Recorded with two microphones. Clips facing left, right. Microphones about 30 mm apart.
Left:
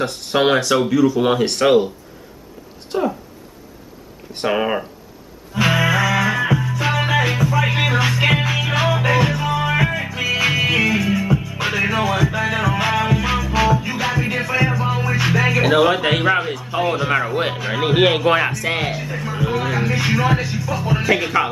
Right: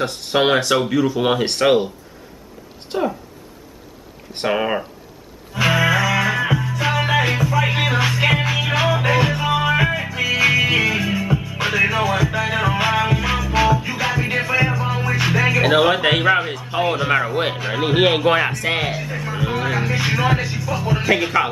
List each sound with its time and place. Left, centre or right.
0.0 s speech: centre
2.9 s speech: centre
4.5 s speech: centre
5.5 s music: centre
13.0 s music: centre
18.5 s speech: centre